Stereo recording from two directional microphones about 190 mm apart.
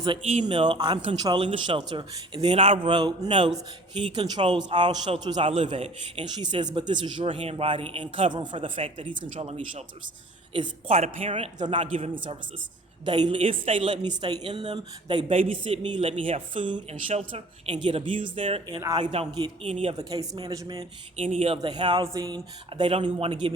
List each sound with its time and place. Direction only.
0.4 s a man's voice: 25° right (ahead or behind)
10.8 s a man's voice: 40° right (ahead or behind)
18.8 s a man's voice: 15° right (ahead or behind)
19.7 s a man's voice: 30° right (ahead or behind)